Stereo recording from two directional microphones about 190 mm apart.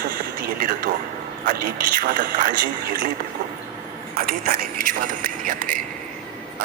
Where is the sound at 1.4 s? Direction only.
50° right (ahead or behind).